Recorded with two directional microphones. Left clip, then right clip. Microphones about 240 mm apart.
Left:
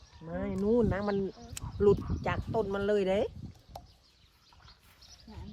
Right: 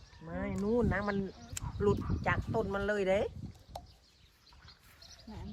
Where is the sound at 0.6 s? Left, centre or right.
Left.